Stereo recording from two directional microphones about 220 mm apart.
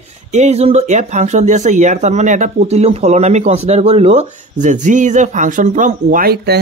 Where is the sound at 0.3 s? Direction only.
30° right (ahead or behind).